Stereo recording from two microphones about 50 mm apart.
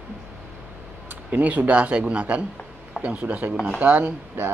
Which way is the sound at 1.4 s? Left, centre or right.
Right.